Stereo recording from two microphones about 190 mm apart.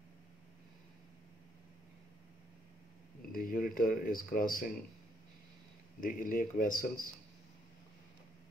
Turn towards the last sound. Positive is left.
turn(degrees=45)  # may be behind; listen again after turning